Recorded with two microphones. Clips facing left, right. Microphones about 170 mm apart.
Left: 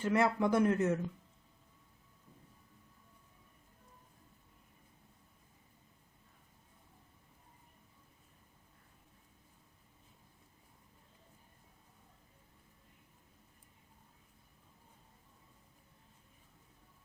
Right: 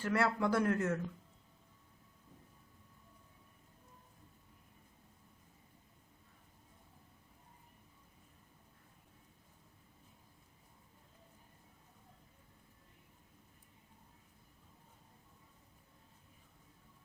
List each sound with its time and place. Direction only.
0.0 s speech: 20° left (ahead or behind)